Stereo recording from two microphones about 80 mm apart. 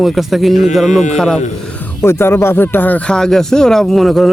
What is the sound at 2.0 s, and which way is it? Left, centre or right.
Speech, left.